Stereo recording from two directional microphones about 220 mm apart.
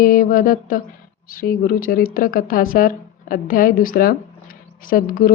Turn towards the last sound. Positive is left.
turn(degrees=40)  # may be behind; listen again after turning